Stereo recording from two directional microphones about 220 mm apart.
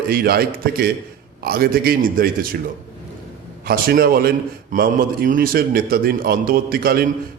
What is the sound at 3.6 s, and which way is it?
A man's voice, 45° right (ahead or behind).